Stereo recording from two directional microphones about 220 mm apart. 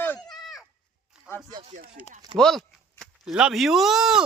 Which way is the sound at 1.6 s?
30° right (ahead or behind).